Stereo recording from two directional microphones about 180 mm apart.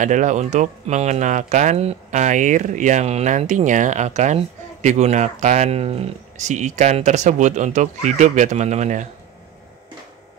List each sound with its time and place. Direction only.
0.0 s speech: 45° right (ahead or behind)